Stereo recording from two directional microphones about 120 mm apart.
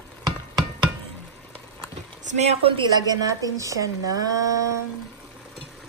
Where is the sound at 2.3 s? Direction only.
70° right (ahead or behind).